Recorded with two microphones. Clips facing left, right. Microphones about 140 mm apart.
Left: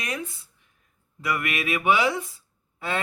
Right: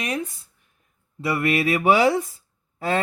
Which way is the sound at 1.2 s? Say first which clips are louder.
Right 6 dB; 30° right (ahead or behind).